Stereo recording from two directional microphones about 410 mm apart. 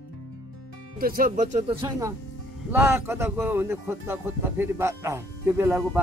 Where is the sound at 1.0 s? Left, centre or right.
Right.